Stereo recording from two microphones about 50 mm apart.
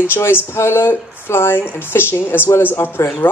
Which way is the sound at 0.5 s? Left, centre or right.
Left.